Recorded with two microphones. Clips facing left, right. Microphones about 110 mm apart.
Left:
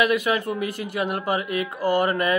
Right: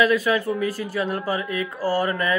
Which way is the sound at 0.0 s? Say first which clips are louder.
Right 2 dB; 20° left (ahead or behind).